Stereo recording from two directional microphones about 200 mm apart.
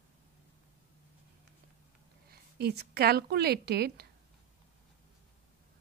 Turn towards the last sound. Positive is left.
turn(degrees=-50)  # may be behind; listen again after turning